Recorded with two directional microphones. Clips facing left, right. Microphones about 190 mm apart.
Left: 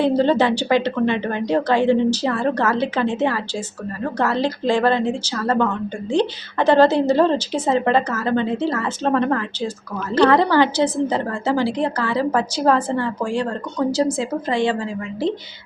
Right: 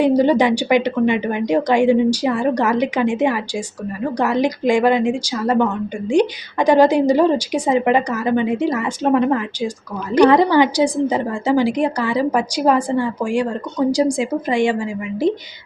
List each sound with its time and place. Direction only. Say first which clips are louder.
0.0 s speech: right 2 dB; 15° right (ahead or behind)